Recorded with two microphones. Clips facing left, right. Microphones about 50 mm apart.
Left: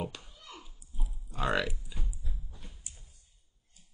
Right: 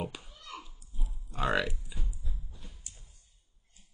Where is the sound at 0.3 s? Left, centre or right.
Right.